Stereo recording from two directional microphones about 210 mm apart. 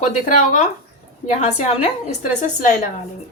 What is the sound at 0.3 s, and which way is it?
A woman's voice, 35° left (ahead or behind).